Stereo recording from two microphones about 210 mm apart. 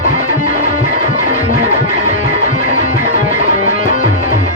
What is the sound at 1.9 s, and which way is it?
Music, 40° left (ahead or behind).